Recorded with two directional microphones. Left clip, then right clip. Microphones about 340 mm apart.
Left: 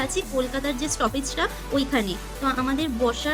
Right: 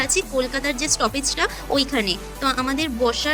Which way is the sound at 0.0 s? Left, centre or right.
Right.